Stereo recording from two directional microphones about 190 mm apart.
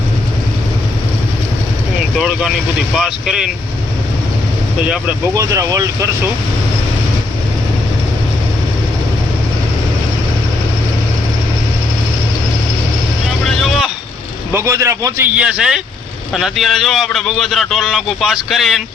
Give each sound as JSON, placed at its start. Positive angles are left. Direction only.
{"t": 2.1, "sound": "speech", "side_deg": -5}
{"t": 5.3, "sound": "speech", "side_deg": -15}
{"t": 13.6, "sound": "vehicle", "side_deg": 0}
{"t": 14.5, "sound": "speech", "side_deg": -15}